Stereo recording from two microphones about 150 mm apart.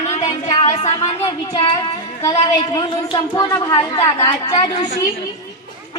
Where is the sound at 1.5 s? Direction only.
35° left (ahead or behind).